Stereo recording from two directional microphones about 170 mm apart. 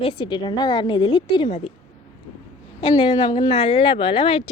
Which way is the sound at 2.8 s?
30° left (ahead or behind).